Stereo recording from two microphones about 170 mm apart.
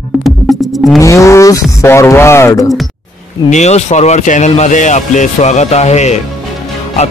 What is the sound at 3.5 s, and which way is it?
Speech, 40° left (ahead or behind).